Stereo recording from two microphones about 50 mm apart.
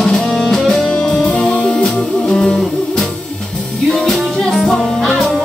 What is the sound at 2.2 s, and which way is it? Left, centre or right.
Music, centre.